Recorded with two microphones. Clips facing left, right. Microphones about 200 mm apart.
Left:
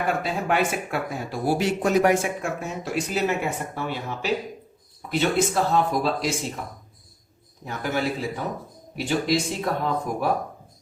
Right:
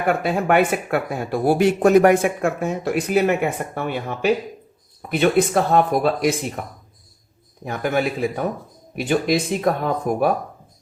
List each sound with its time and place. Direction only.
0.2 s speech: 60° right (ahead or behind)
7.6 s speech: 55° right (ahead or behind)